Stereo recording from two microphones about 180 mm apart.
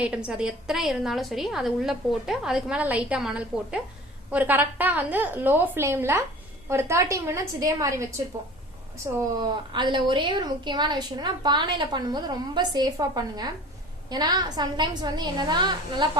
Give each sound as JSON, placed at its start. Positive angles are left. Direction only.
{"t": 0.0, "sound": "a woman's voice", "side_deg": -5}
{"t": 9.3, "sound": "a woman's voice", "side_deg": -25}